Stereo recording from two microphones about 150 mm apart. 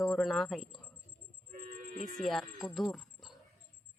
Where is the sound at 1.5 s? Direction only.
60° right (ahead or behind).